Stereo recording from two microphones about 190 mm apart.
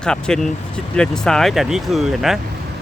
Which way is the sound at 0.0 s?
5° left (ahead or behind).